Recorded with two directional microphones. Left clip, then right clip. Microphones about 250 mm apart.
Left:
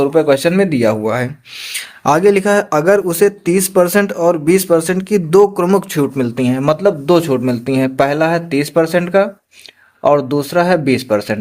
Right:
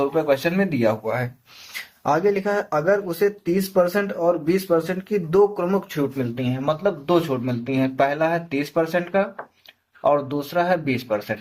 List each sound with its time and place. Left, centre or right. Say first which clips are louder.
0.0 s speech: left 8 dB; left